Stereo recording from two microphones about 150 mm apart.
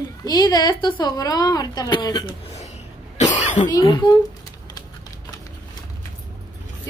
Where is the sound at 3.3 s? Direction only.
55° left (ahead or behind).